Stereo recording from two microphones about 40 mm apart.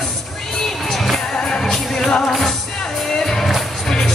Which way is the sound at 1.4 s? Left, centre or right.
Centre.